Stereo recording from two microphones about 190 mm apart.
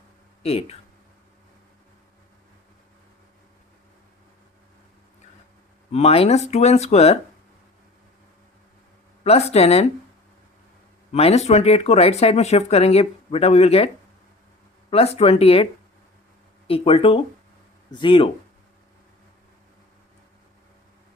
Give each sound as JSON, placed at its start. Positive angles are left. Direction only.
{"t": 0.4, "sound": "speech", "side_deg": 30}
{"t": 5.9, "sound": "speech", "side_deg": 35}
{"t": 9.2, "sound": "speech", "side_deg": 35}
{"t": 11.1, "sound": "speech", "side_deg": 35}
{"t": 16.6, "sound": "speech", "side_deg": 30}